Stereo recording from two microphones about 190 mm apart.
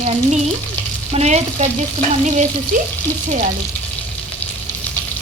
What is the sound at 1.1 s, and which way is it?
Frying, 35° right (ahead or behind).